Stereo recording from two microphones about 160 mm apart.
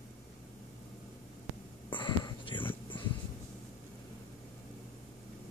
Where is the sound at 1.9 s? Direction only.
30° left (ahead or behind).